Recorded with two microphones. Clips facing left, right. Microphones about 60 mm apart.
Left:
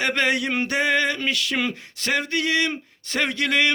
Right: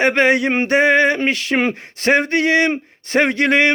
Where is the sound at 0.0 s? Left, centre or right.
Right.